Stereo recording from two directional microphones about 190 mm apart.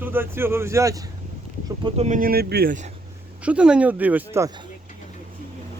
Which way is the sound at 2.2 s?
55° right (ahead or behind).